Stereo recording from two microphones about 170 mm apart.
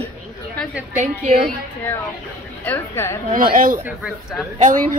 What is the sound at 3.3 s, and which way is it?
A woman's voice, 55° right (ahead or behind).